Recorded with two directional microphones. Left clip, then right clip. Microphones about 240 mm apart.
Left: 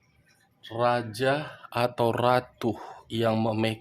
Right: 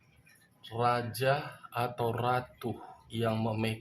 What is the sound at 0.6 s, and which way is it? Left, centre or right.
Speech, left.